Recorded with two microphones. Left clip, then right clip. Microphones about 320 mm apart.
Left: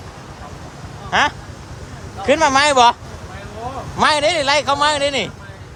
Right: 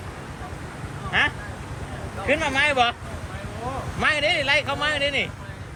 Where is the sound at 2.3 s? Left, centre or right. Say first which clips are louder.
Left 8 dB; left.